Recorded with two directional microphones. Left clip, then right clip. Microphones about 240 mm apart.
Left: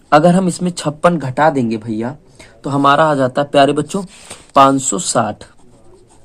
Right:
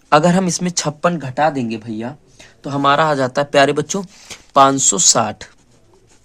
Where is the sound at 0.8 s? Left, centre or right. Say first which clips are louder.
Left 4 dB; right.